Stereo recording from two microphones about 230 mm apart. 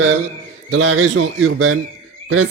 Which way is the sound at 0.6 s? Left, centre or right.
Right.